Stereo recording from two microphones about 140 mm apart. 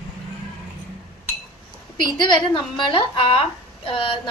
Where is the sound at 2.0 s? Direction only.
35° left (ahead or behind).